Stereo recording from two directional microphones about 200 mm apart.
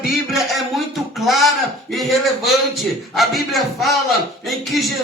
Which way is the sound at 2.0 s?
Centre (ahead or behind).